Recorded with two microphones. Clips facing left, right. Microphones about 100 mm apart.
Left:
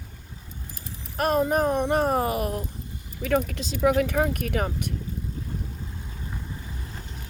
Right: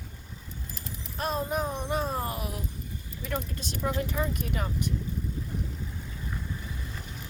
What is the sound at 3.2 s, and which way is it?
Speech, 80° left.